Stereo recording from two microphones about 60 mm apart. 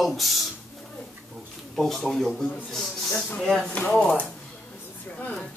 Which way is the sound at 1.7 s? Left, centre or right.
Centre.